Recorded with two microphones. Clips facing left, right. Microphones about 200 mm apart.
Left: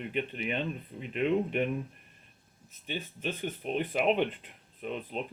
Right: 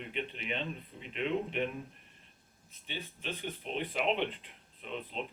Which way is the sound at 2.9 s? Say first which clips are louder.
Left 5 dB; 50° left (ahead or behind).